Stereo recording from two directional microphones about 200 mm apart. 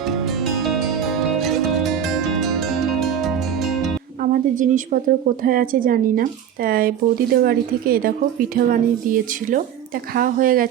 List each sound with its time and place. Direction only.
0.0 s music: centre (ahead or behind)
4.2 s a woman's voice: 40° right (ahead or behind)